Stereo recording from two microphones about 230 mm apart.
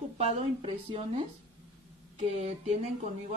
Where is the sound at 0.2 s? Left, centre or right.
Right.